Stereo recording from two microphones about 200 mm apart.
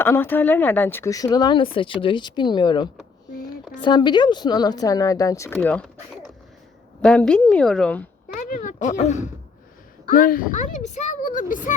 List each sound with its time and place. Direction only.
0.0 s a woman's voice: 10° left (ahead or behind)
8.4 s a woman's voice: 40° left (ahead or behind)